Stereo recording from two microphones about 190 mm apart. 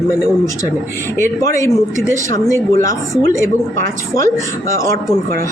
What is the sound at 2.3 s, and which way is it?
Speech, 15° left (ahead or behind).